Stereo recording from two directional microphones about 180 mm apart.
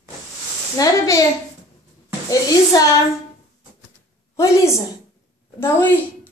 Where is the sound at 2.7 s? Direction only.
20° left (ahead or behind).